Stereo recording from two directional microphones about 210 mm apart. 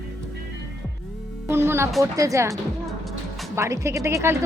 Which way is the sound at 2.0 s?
15° right (ahead or behind).